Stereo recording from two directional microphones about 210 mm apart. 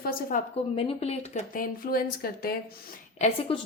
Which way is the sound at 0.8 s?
30° left (ahead or behind).